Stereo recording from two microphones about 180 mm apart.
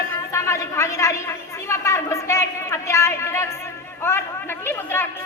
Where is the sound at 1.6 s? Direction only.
15° left (ahead or behind).